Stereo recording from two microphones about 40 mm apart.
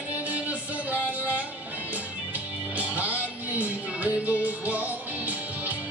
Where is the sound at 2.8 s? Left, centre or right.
Right.